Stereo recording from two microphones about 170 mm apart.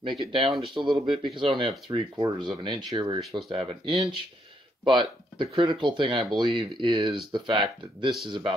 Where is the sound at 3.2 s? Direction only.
Centre (ahead or behind).